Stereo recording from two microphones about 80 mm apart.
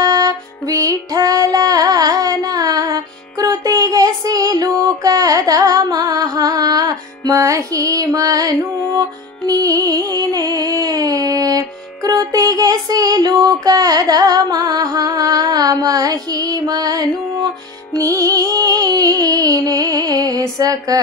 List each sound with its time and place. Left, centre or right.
0.0 s music: right